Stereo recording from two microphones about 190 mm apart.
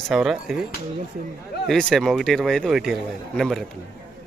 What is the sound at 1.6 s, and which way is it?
A man's voice, centre (ahead or behind).